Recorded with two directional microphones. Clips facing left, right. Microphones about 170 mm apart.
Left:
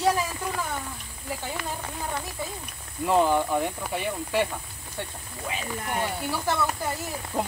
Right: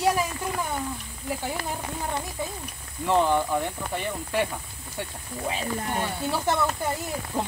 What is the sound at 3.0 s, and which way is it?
Speech, 10° left (ahead or behind).